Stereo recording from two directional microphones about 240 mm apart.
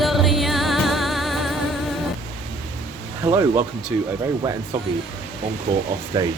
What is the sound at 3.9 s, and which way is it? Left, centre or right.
Speech, centre.